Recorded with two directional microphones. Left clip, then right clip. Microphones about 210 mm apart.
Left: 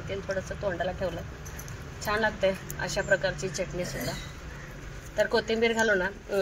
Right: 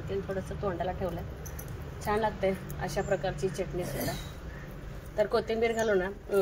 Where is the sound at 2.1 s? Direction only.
10° left (ahead or behind).